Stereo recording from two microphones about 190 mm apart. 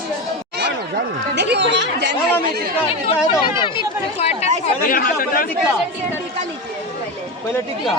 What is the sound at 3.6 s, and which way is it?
Speech, 30° left (ahead or behind).